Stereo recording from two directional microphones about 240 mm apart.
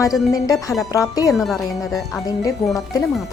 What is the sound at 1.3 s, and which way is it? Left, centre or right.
Music, centre.